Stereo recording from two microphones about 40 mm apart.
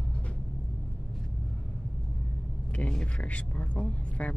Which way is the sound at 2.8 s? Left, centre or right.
Left.